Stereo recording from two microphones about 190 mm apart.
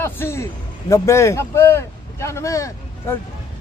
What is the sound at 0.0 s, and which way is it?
A man's voice, 15° left (ahead or behind).